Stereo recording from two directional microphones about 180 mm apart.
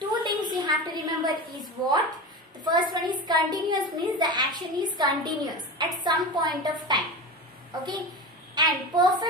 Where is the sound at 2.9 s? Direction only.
25° right (ahead or behind).